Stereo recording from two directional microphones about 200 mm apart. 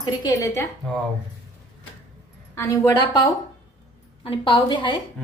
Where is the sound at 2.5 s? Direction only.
15° left (ahead or behind).